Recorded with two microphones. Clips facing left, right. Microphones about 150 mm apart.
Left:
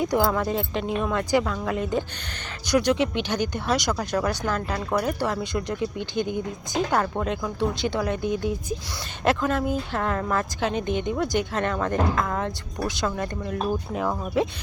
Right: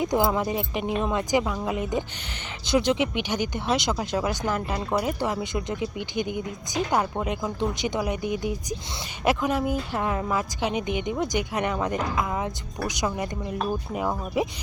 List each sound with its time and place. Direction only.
0.0 s a woman's voice: 20° right (ahead or behind)